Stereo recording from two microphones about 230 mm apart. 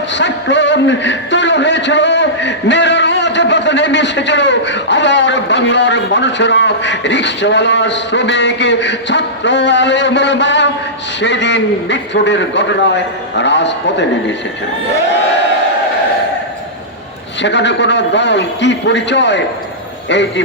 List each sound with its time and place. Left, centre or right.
0.1 s a man's voice: left
17.4 s a man's voice: left